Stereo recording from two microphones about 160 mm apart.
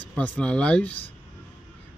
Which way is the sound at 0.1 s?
5° left (ahead or behind).